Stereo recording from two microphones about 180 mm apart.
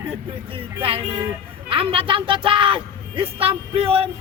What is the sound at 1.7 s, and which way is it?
A woman's voice, 30° right (ahead or behind).